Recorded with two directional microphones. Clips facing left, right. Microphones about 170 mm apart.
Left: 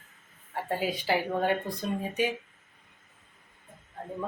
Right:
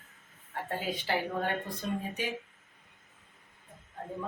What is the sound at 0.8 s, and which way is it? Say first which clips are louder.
Speech: left 4 dB; 10° left (ahead or behind).